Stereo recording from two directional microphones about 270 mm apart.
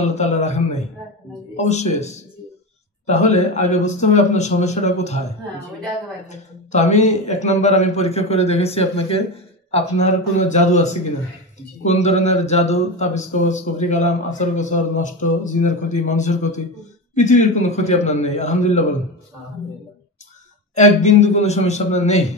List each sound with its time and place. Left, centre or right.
0.0 s speech: left
1.6 s speech: left
3.1 s speech: left
6.2 s speech: left
20.7 s speech: left